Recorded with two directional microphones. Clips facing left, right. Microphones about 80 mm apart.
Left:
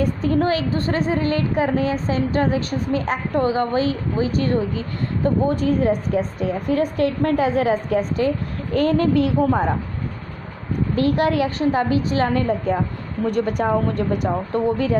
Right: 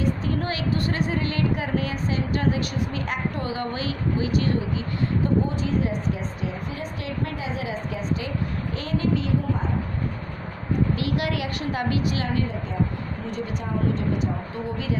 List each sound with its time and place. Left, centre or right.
0.0 s a woman's voice: left
11.0 s a woman's voice: left
12.4 s a woman's voice: left
13.3 s a woman's voice: left